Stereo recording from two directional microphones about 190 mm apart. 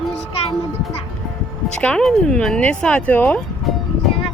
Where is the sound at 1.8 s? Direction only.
5° left (ahead or behind).